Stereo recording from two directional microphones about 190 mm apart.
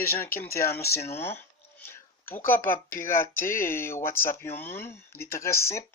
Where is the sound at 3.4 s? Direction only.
15° left (ahead or behind).